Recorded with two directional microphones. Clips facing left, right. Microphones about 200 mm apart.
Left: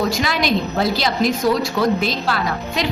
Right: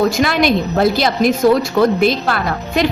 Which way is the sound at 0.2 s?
55° right (ahead or behind).